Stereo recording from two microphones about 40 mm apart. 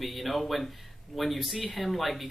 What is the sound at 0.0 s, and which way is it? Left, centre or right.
Speech, centre.